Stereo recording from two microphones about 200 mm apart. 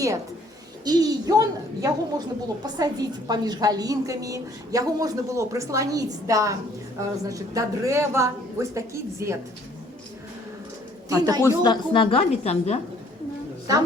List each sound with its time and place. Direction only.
0.9 s a woman's voice: 20° right (ahead or behind)
11.1 s a woman's voice: 20° right (ahead or behind)
11.4 s a woman's voice: 20° left (ahead or behind)